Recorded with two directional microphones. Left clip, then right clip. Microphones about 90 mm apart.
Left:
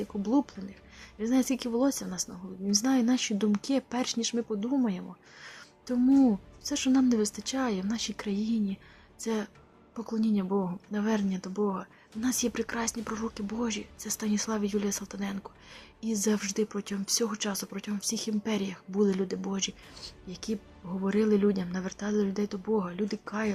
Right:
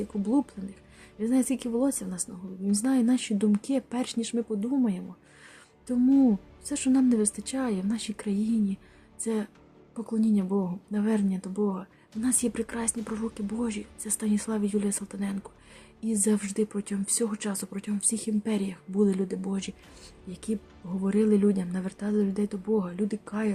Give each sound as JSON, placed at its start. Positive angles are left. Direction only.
{"t": 1.2, "sound": "speech", "side_deg": -30}